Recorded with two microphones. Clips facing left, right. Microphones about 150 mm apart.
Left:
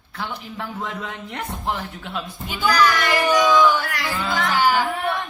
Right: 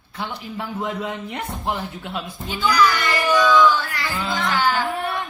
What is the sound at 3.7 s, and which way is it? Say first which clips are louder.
Music: even; 75° left (ahead or behind).